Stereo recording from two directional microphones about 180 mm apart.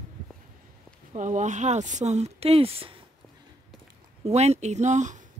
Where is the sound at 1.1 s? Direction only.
40° right (ahead or behind).